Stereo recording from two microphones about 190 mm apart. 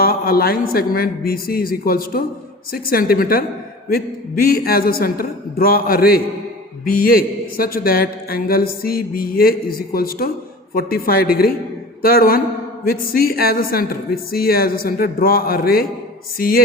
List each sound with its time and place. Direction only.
0.0 s a man's voice: 55° left (ahead or behind)